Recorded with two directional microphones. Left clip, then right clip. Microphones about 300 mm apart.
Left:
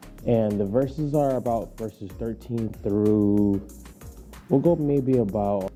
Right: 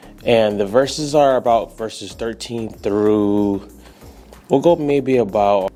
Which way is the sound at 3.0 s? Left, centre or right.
Right.